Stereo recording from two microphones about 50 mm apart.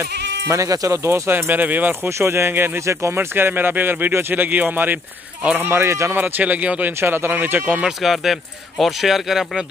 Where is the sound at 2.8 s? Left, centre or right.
Right.